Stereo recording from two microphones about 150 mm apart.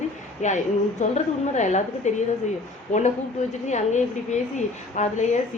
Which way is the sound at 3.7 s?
50° left (ahead or behind).